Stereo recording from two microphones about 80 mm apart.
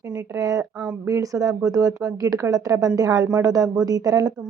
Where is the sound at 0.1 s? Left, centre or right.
Right.